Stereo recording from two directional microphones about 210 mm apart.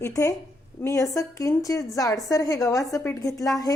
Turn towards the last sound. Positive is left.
turn(degrees=15)  # may be behind; listen again after turning